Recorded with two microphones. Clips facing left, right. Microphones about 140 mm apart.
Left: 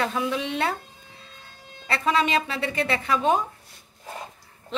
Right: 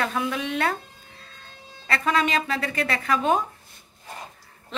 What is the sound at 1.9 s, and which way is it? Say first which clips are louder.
A woman's voice: even; 25° left (ahead or behind).